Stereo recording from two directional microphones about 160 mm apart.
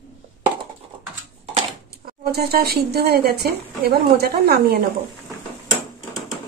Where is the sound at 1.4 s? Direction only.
35° right (ahead or behind).